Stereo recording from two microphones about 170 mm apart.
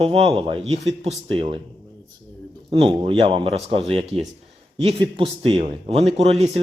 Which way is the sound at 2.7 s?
35° right (ahead or behind).